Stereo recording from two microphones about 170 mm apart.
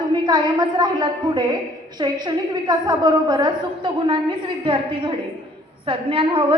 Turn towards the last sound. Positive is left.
turn(degrees=-30)  # may be behind; listen again after turning